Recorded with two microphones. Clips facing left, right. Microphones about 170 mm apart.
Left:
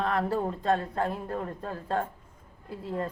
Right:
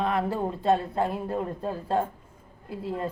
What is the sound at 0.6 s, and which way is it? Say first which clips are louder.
Speech: right 3 dB; 30° right (ahead or behind).